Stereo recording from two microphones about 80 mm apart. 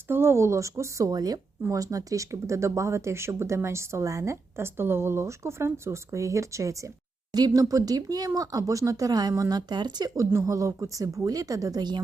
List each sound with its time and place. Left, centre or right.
0.1 s speech: right
7.3 s speech: right
10.2 s speech: right